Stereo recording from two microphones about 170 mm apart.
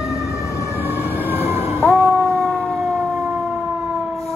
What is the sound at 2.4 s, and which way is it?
Fire engine, centre (ahead or behind).